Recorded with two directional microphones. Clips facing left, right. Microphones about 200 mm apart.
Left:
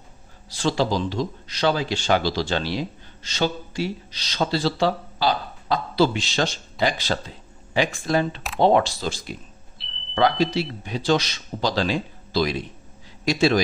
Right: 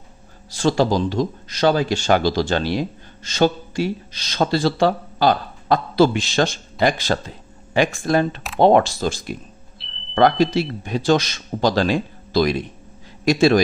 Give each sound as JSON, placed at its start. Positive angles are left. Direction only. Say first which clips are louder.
{"t": 0.5, "sound": "speech", "louder": "right 5 dB", "side_deg": -45}
{"t": 9.8, "sound": "smoke detector", "louder": "right 1 dB", "side_deg": 0}
{"t": 10.1, "sound": "speech", "louder": "right 4 dB", "side_deg": -50}